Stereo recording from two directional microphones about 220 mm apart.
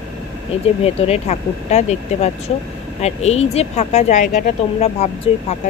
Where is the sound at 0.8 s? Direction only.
25° left (ahead or behind).